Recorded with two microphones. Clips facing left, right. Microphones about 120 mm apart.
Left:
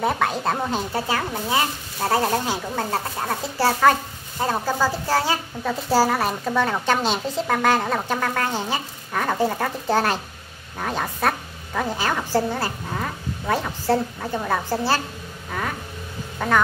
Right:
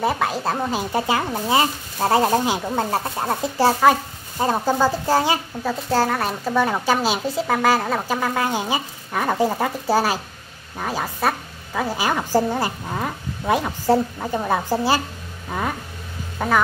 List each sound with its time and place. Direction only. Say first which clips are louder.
0.0 s speech: even; centre (ahead or behind)
0.9 s a woman's voice: right 3 dB; 15° right (ahead or behind)
5.9 s a woman's voice: left 2 dB; 5° left (ahead or behind); by 15.0 s 15° right (ahead or behind)
16.3 s speech: right 1 dB; 5° right (ahead or behind)